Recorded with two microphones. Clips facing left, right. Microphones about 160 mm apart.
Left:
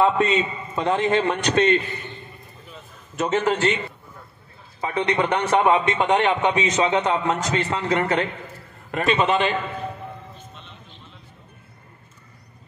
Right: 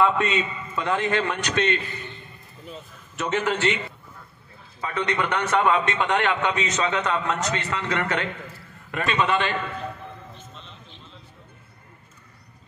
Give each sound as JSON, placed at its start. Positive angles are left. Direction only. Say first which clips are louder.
{"t": 0.0, "sound": "a man's voice", "louder": "left 3 dB", "side_deg": 35}
{"t": 3.2, "sound": "a man's voice", "louder": "left 4 dB", "side_deg": 35}
{"t": 4.7, "sound": "a man's voice", "louder": "left 4 dB", "side_deg": 30}